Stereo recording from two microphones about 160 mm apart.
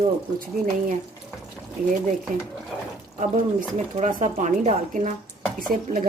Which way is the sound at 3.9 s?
50° right (ahead or behind).